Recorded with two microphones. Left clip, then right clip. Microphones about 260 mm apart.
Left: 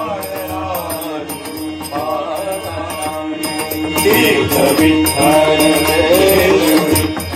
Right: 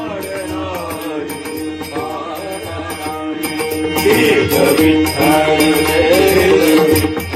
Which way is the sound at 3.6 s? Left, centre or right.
Centre.